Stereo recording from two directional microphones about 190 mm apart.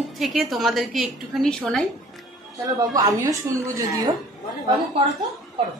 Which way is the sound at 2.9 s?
20° right (ahead or behind).